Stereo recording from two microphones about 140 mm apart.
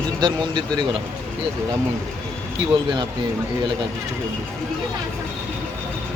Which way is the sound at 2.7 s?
35° right (ahead or behind).